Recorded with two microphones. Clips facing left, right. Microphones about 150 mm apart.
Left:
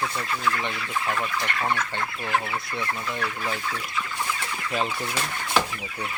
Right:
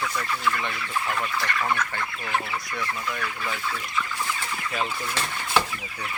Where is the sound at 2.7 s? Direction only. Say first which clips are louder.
Even; 25° left (ahead or behind).